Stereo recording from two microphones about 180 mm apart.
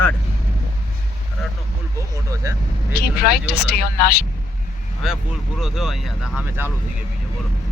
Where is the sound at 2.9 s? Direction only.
60° left (ahead or behind).